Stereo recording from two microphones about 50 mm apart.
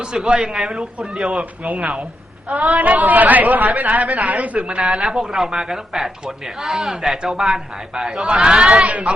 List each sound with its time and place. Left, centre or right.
0.0 s speech: centre
1.3 s a woman's voice: right
4.7 s speech: centre